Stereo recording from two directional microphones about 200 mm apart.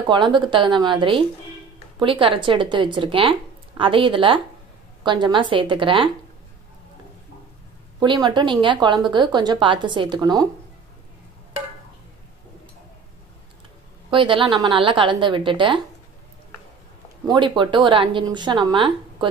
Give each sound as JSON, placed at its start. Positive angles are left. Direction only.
{"t": 0.1, "sound": "a woman's voice", "side_deg": -25}
{"t": 8.0, "sound": "a woman's voice", "side_deg": -20}
{"t": 14.1, "sound": "a woman's voice", "side_deg": -25}
{"t": 17.3, "sound": "a woman's voice", "side_deg": -25}